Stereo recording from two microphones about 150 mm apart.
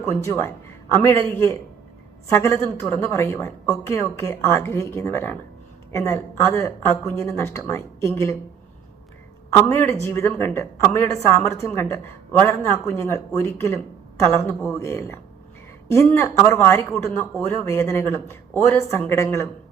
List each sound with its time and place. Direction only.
0.0 s speech: 20° left (ahead or behind)
9.7 s speech: 15° left (ahead or behind)